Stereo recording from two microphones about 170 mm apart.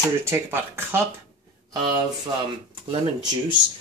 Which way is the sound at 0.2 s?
15° right (ahead or behind).